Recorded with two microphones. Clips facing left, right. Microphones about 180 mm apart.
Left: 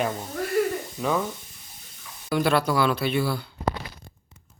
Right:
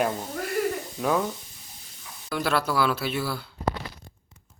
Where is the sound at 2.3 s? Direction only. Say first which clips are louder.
Left 4 dB; centre (ahead or behind).